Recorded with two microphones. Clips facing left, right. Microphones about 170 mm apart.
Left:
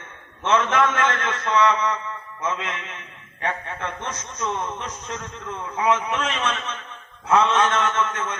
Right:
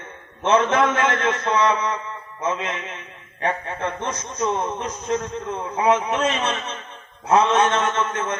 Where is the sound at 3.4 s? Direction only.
35° right (ahead or behind).